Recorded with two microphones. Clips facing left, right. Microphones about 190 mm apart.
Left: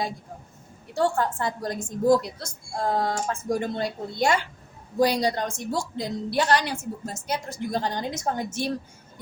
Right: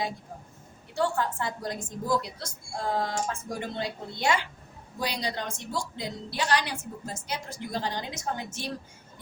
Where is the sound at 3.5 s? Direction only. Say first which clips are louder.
Left 7 dB; 45° left (ahead or behind).